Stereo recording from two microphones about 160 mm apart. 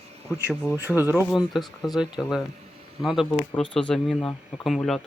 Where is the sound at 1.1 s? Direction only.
Centre (ahead or behind).